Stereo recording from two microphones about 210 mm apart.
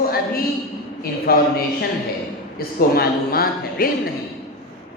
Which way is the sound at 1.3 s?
45° left (ahead or behind).